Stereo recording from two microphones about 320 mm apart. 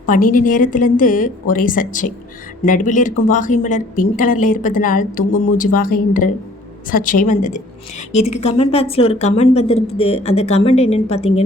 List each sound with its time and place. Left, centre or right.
0.3 s speech: left